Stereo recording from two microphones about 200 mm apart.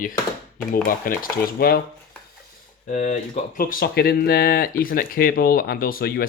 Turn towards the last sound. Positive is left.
turn(degrees=50)  # may be behind; listen again after turning